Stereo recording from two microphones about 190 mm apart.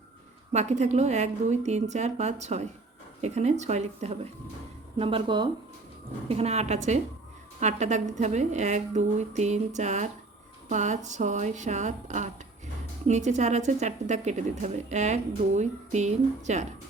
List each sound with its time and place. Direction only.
0.5 s a woman's voice: 35° right (ahead or behind)